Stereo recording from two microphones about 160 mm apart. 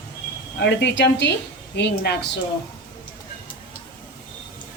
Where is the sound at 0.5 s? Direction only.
90° left.